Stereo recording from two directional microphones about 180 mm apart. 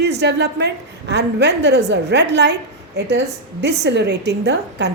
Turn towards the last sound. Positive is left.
turn(degrees=-70)  # may be behind; listen again after turning